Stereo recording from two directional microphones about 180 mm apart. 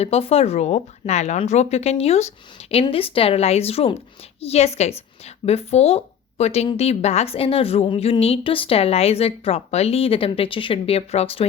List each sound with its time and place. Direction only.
0.0 s a woman's voice: 35° left (ahead or behind)